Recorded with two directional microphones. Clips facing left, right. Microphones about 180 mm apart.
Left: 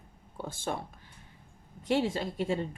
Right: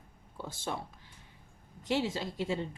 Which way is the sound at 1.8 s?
55° left (ahead or behind).